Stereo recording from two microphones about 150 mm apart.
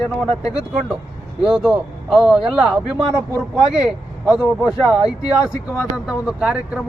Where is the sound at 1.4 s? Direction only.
5° right (ahead or behind).